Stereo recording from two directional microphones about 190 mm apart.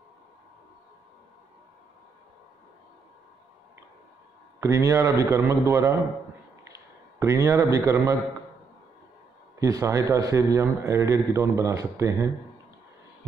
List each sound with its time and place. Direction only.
4.6 s a man's voice: 15° right (ahead or behind)
9.6 s a man's voice: 15° right (ahead or behind)